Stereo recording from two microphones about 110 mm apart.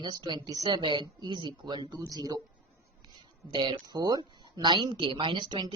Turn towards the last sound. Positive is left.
turn(degrees=-45)  # may be behind; listen again after turning